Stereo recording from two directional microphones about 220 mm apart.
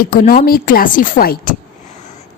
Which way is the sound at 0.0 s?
40° left (ahead or behind).